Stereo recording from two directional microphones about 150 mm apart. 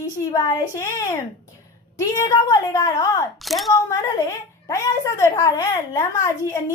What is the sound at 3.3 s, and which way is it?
Speech, centre (ahead or behind).